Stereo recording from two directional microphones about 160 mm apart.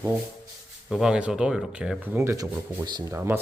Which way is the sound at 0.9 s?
5° right (ahead or behind).